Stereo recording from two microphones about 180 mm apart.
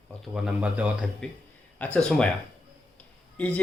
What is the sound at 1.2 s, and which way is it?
Speech, 5° left (ahead or behind).